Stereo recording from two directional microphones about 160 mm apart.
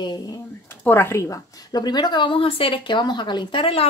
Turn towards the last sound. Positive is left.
turn(degrees=35)  # may be behind; listen again after turning